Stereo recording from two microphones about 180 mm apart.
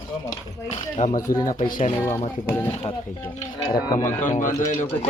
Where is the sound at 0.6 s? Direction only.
40° left (ahead or behind).